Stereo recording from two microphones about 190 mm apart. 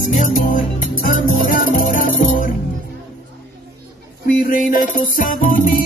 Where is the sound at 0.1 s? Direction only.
45° left (ahead or behind).